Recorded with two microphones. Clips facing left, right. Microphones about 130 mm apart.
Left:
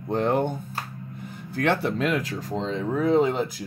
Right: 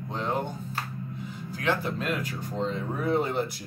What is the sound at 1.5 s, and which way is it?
Speech, 65° left (ahead or behind).